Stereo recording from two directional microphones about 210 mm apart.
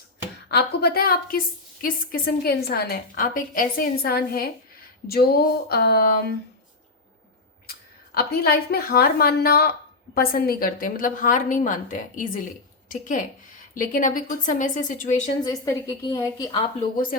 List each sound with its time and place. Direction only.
0.4 s a woman's voice: 50° left (ahead or behind)
7.7 s a woman's voice: 45° left (ahead or behind)
15.4 s a woman's voice: 15° left (ahead or behind)